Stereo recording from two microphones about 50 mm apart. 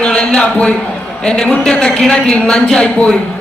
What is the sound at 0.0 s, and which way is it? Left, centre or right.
A man's voice, centre.